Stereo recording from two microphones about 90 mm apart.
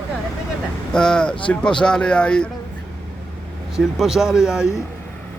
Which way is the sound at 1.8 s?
10° left (ahead or behind).